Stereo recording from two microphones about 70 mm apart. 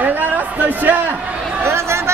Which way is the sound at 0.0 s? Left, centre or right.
Right.